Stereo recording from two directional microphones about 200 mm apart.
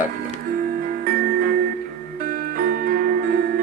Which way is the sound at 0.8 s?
45° right (ahead or behind).